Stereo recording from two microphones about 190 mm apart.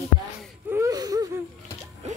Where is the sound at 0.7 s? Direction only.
10° right (ahead or behind).